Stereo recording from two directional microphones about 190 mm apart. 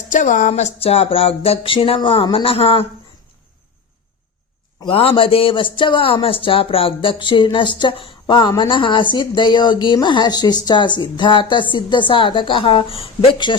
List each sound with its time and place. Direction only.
0.1 s a man's voice: 40° left (ahead or behind)
4.8 s a man's voice: 30° left (ahead or behind)